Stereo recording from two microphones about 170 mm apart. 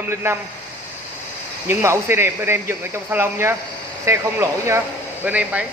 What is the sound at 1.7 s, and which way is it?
A man's voice, 15° right (ahead or behind).